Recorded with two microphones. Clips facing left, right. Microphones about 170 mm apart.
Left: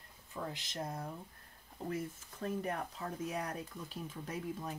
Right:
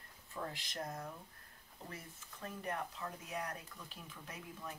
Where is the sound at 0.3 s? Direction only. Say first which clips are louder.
Left 2 dB; 20° left (ahead or behind).